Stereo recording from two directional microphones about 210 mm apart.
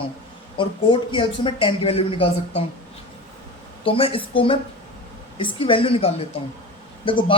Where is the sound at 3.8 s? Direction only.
25° left (ahead or behind).